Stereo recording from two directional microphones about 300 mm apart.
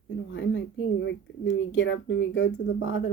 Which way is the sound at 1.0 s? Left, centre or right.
Left.